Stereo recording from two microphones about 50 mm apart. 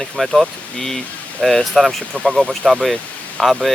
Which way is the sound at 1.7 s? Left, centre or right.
Centre.